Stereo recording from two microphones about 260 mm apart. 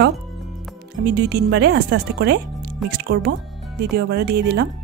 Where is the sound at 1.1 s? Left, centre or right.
Right.